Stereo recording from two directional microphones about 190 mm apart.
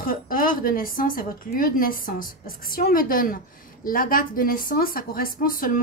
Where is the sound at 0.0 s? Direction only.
45° left (ahead or behind).